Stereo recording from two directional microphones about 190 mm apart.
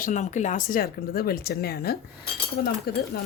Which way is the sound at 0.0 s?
40° left (ahead or behind).